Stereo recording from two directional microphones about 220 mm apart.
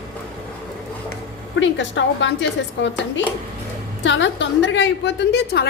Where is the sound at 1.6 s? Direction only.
55° left (ahead or behind).